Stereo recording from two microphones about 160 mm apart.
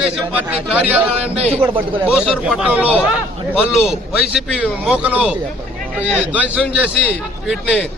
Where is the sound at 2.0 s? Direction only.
5° right (ahead or behind).